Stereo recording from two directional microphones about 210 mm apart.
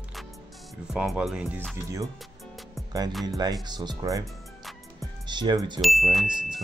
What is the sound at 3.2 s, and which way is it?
Speech, 20° right (ahead or behind).